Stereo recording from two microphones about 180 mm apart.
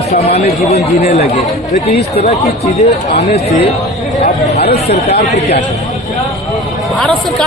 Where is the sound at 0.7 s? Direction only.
35° left (ahead or behind).